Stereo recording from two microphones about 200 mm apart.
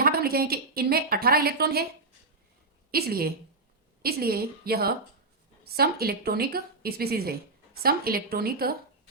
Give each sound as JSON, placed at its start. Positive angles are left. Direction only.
{"t": 0.0, "sound": "a woman's voice", "side_deg": -50}
{"t": 2.9, "sound": "a woman's voice", "side_deg": -50}